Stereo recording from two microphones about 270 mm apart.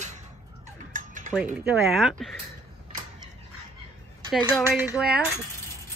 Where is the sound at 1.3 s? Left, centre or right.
Centre.